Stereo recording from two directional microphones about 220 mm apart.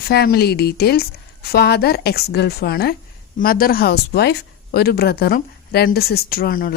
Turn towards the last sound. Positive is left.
turn(degrees=45)  # may be behind; listen again after turning